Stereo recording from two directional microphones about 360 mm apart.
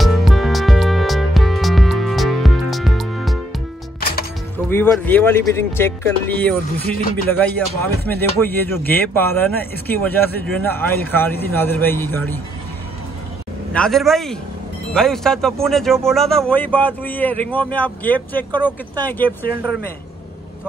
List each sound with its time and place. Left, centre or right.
0.0 s music: centre
4.0 s music: left
4.6 s speech: centre
13.7 s speech: centre
18.5 s speech: centre
19.0 s speech: centre